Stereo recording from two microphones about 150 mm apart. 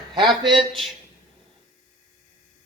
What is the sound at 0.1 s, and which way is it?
Speech, 30° right (ahead or behind).